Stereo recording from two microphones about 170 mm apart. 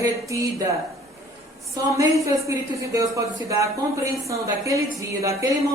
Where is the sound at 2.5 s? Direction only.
20° right (ahead or behind).